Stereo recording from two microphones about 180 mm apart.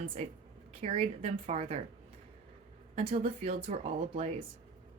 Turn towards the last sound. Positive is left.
turn(degrees=-35)  # may be behind; listen again after turning